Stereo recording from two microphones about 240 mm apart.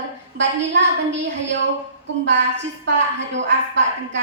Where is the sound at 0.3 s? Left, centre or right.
Right.